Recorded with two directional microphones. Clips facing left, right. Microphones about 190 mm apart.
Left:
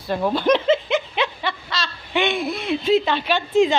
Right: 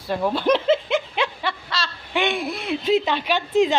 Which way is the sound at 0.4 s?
5° right (ahead or behind).